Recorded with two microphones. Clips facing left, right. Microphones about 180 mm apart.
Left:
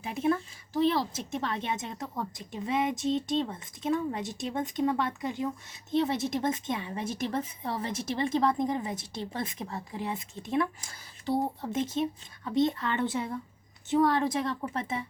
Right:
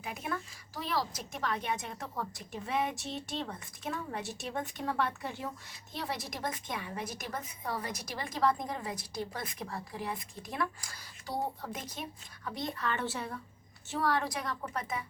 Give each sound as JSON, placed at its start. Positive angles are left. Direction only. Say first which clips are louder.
{"t": 0.0, "sound": "a woman's voice", "louder": "left 10 dB", "side_deg": 25}